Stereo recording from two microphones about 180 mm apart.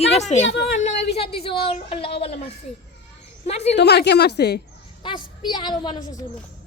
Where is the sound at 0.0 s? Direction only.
35° left (ahead or behind).